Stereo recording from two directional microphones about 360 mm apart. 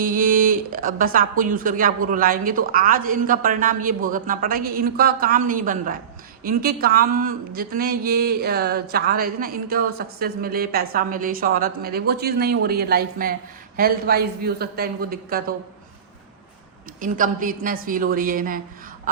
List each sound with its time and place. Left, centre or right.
0.0 s speech: right
17.0 s speech: right